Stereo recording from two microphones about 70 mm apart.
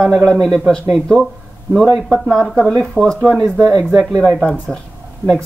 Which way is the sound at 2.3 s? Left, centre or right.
Centre.